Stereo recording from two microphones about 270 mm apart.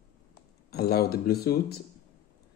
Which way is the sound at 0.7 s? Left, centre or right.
Left.